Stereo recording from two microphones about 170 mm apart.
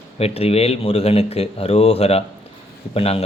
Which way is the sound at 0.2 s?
35° left (ahead or behind).